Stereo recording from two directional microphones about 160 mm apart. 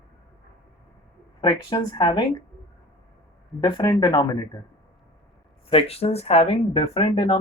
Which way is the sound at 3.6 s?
25° left (ahead or behind).